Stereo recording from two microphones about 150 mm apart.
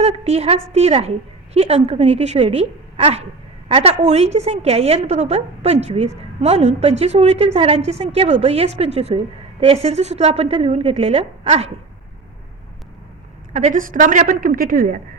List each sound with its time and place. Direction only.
0.0 s a woman's voice: 45° right (ahead or behind)
13.5 s a woman's voice: 50° right (ahead or behind); by 14.9 s 70° right (ahead or behind)